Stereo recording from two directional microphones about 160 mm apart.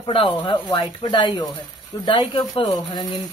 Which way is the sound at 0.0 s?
30° left (ahead or behind).